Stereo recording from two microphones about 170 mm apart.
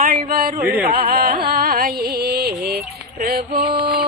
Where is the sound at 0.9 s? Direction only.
65° right (ahead or behind).